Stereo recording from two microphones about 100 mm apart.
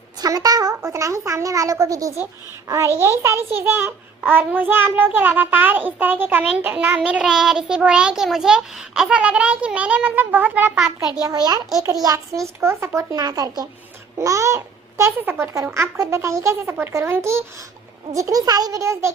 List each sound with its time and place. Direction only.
0.2 s a child's voice: 40° right (ahead or behind); by 3.9 s 20° right (ahead or behind)
4.3 s child singing: 20° right (ahead or behind)
11.0 s speech: 40° right (ahead or behind)
12.0 s a child's voice: 30° right (ahead or behind)